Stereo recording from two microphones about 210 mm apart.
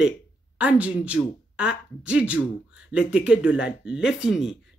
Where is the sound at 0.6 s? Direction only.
5° right (ahead or behind).